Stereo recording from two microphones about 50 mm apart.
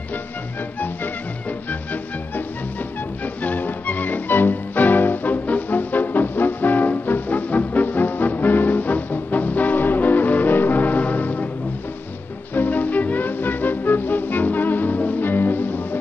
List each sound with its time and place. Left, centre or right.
3.4 s music: left
12.5 s music: left